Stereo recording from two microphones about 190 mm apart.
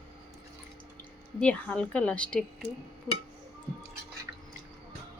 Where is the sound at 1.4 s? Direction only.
5° left (ahead or behind).